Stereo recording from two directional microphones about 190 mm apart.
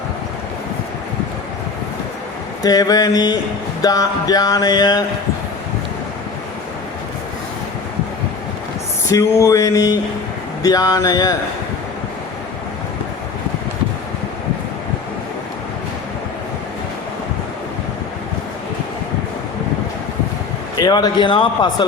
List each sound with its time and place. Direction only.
2.6 s music: 20° left (ahead or behind)
9.0 s a sound: 15° left (ahead or behind)
10.6 s music: 20° left (ahead or behind)
20.7 s music: 20° left (ahead or behind)